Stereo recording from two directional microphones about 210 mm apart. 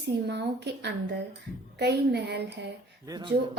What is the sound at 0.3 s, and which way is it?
A woman's voice, 55° right (ahead or behind).